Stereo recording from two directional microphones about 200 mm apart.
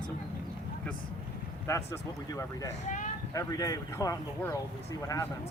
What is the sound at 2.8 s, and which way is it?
Speech, 40° left (ahead or behind).